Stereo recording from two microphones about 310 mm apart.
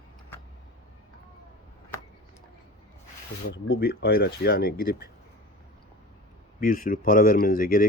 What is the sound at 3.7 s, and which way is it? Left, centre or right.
Speech, left.